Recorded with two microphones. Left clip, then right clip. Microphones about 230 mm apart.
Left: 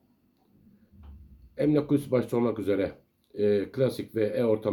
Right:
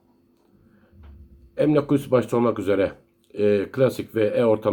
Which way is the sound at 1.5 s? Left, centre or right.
Centre.